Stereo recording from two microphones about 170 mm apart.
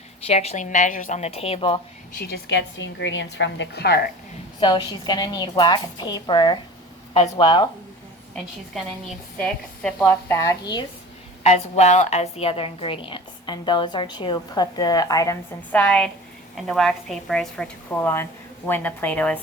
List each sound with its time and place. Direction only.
0.3 s a woman's voice: 40° left (ahead or behind)
2.1 s a woman's voice: 65° left (ahead or behind)
4.6 s a woman's voice: 25° left (ahead or behind)
10.0 s a woman's voice: 15° left (ahead or behind)
11.4 s a woman's voice: 40° left (ahead or behind); by 15.4 s 20° left (ahead or behind)
15.7 s a woman's voice: 5° left (ahead or behind)